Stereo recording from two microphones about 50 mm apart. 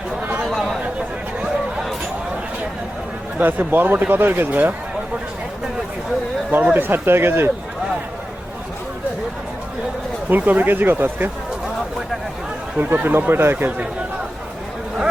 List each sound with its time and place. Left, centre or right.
0.4 s chatter: centre
0.9 s a sound: right
3.3 s speech: right
6.7 s speech: right
10.2 s speech: right
12.8 s speech: right
13.2 s speech: right